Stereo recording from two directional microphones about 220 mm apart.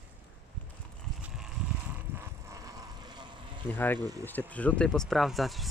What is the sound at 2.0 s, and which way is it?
Vehicle, 10° right (ahead or behind).